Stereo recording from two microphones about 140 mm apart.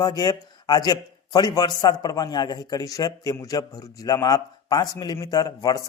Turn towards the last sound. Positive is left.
turn(degrees=25)  # may be behind; listen again after turning